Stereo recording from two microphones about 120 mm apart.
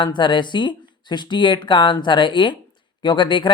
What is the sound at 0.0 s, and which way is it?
Speech, 40° left (ahead or behind).